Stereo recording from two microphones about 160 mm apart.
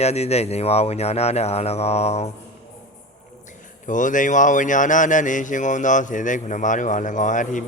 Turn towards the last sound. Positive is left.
turn(degrees=50)  # may be behind; listen again after turning